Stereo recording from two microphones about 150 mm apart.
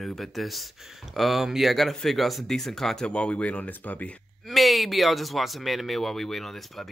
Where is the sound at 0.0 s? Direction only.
Centre (ahead or behind).